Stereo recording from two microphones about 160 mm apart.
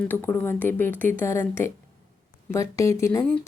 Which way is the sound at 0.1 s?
10° left (ahead or behind).